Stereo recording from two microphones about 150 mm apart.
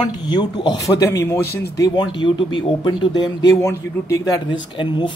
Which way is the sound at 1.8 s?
30° left (ahead or behind).